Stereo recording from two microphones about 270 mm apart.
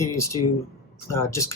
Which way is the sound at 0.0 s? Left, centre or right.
Centre.